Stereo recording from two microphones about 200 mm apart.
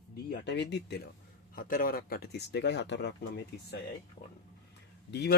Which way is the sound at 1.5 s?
45° left (ahead or behind).